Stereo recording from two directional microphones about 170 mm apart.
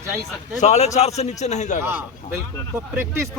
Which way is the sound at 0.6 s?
40° left (ahead or behind).